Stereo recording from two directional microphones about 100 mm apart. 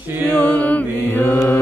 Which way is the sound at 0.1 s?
25° right (ahead or behind).